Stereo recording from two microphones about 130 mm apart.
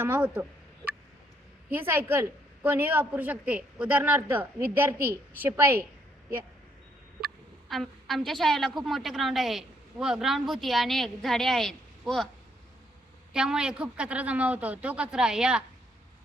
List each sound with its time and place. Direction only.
0.0 s a woman's voice: 15° right (ahead or behind)
1.7 s a woman's voice: 15° right (ahead or behind)
7.7 s a woman's voice: centre (ahead or behind)
13.3 s a woman's voice: 5° right (ahead or behind)